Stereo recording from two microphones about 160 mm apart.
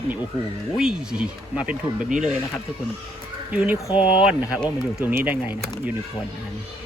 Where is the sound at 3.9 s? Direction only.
35° left (ahead or behind).